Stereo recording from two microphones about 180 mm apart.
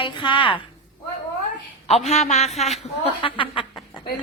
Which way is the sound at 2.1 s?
40° left (ahead or behind).